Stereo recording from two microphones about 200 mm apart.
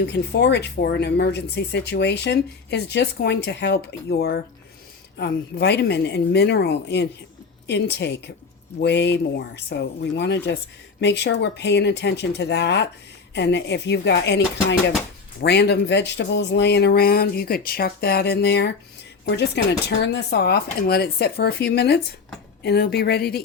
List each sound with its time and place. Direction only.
0.0 s a woman's voice: 60° left (ahead or behind)